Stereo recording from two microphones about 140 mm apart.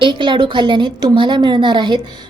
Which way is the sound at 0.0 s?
35° right (ahead or behind).